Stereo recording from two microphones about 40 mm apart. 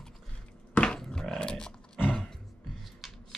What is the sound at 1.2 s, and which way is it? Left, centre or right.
Dog, centre.